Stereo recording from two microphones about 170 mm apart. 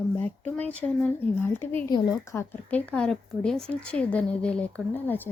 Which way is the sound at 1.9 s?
20° left (ahead or behind).